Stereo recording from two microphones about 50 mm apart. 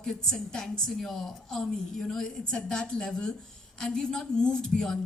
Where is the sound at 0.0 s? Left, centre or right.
Centre.